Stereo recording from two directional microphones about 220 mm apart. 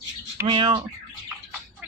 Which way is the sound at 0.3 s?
20° right (ahead or behind).